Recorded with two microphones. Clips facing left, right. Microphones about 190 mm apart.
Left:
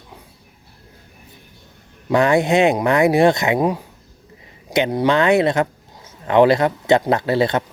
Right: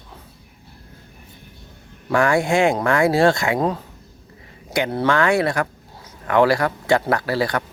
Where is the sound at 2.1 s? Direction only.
20° left (ahead or behind).